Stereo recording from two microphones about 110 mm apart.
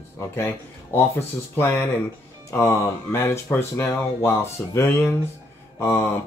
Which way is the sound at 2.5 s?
25° left (ahead or behind).